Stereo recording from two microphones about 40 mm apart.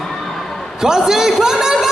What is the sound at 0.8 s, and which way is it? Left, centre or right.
A man's voice, centre.